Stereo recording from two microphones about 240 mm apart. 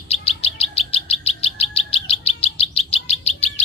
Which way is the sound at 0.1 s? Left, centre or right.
Left.